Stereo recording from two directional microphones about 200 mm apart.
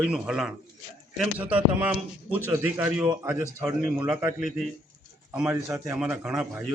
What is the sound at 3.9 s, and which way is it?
A man's voice, 5° right (ahead or behind).